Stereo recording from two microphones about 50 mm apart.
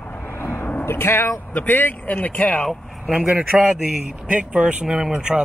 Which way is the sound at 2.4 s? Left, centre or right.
Left.